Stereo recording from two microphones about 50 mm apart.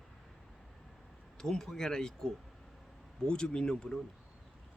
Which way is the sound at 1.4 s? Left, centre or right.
Centre.